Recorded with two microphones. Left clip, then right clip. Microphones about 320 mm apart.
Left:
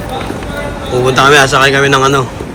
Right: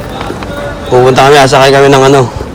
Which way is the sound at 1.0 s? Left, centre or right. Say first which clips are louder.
Right 3 dB; centre.